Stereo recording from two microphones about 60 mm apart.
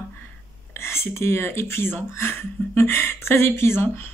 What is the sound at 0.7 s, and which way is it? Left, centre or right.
Speech, left.